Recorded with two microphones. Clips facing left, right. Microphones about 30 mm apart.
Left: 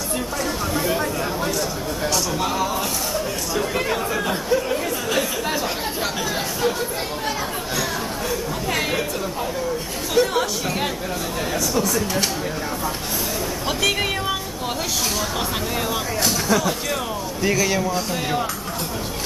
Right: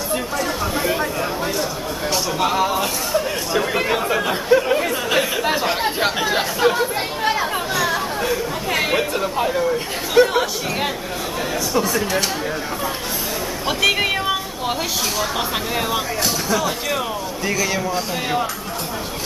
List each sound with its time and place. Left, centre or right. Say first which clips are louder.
0.1 s a sound: right 3 dB; centre
7.7 s chatter: right 3 dB; centre
10.1 s speech: right 4 dB; centre
13.7 s speech: right 4 dB; centre
16.4 s speech: even; centre